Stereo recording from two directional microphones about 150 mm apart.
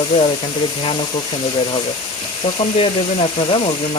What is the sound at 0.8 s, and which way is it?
Speech, 35° left (ahead or behind).